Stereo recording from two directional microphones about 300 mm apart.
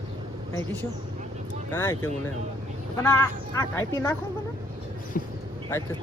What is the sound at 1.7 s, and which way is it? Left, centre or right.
Speech, centre.